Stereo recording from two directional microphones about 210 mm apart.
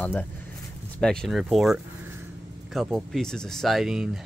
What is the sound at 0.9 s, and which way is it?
Speech, 5° left (ahead or behind).